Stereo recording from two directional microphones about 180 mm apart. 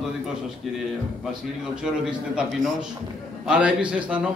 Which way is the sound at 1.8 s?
5° right (ahead or behind).